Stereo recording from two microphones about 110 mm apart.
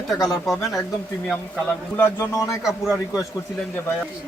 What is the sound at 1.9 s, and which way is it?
Speech, 20° left (ahead or behind).